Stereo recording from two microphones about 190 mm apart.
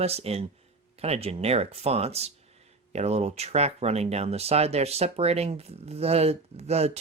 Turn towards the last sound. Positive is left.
turn(degrees=-35)  # may be behind; listen again after turning